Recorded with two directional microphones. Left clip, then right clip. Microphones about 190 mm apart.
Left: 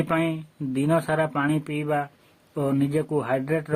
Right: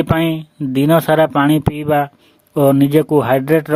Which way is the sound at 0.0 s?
40° right (ahead or behind).